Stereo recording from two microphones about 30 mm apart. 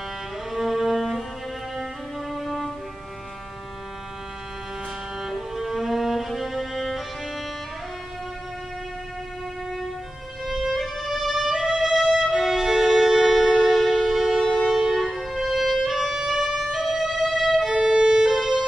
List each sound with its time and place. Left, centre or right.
0.5 s music: centre
2.3 s music: centre
5.2 s music: centre
10.7 s music: centre
11.9 s violin: centre
13.3 s music: centre
14.4 s music: left
15.0 s music: centre
17.6 s violin: right
18.4 s music: right